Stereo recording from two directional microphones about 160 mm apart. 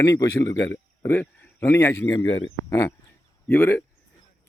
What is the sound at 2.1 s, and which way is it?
Speech, 30° left (ahead or behind).